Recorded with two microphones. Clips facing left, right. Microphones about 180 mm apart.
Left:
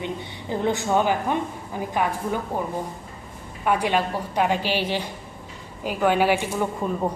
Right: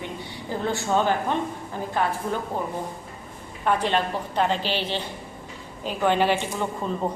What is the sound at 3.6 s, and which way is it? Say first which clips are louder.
A woman's voice: left 1 dB; 10° left (ahead or behind).